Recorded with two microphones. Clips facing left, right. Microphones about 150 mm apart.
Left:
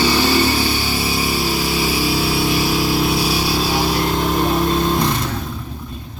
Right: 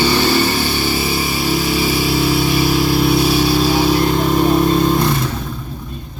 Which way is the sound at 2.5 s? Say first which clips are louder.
Right 3 dB; centre (ahead or behind).